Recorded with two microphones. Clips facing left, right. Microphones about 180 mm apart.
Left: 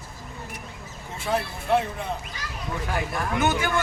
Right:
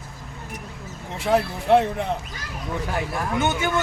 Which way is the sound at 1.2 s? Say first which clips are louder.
Right 6 dB; 65° right (ahead or behind).